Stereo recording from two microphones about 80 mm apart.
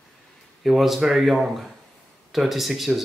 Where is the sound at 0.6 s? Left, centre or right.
Centre.